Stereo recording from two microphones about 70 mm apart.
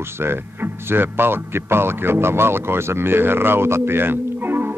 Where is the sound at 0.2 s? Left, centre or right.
Right.